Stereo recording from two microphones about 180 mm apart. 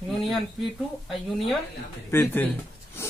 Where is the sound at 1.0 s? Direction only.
Centre (ahead or behind).